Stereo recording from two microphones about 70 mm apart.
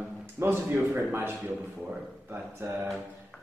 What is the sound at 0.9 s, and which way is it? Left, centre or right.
A man's voice, centre.